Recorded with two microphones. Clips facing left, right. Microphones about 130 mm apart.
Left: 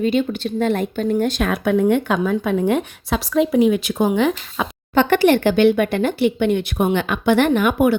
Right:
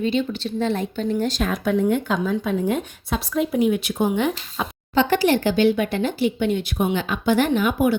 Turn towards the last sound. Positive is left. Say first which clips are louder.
# left 3 dB
turn(degrees=65)  # may be behind; listen again after turning